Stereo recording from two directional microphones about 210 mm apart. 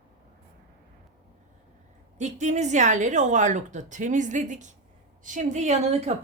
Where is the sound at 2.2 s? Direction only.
35° right (ahead or behind).